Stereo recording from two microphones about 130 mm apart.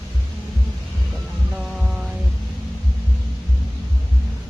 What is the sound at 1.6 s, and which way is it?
Music, 5° right (ahead or behind).